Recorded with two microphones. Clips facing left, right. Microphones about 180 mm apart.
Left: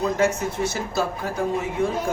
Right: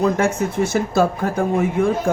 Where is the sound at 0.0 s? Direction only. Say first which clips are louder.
Right 3 dB; 50° right (ahead or behind).